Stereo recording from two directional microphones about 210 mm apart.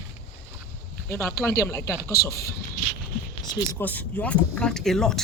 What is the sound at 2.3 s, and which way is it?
Speech, 45° left (ahead or behind).